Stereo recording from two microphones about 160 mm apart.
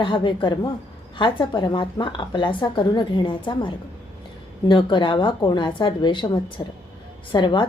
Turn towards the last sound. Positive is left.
turn(degrees=30)  # may be behind; listen again after turning